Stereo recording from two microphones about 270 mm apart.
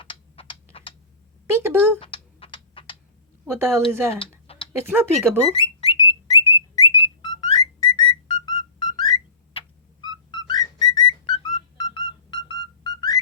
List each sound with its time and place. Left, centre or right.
0.0 s typing: centre
1.5 s speech: centre
2.0 s typing: centre
3.6 s speech: centre
4.1 s tick-tock: left
4.9 s speech: centre
5.6 s bird: centre
10.9 s music: centre